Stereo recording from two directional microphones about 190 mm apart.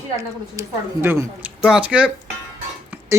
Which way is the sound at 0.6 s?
15° right (ahead or behind).